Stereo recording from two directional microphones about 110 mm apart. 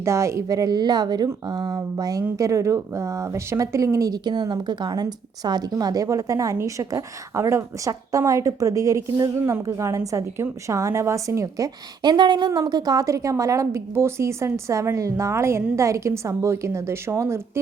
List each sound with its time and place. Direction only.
0.0 s a woman's voice: 25° right (ahead or behind)